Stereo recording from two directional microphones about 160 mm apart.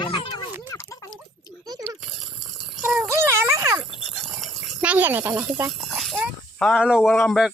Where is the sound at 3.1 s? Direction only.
15° right (ahead or behind).